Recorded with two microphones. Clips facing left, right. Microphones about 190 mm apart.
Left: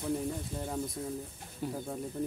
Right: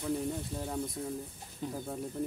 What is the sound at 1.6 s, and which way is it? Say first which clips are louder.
Speech: left 2 dB; 10° left (ahead or behind).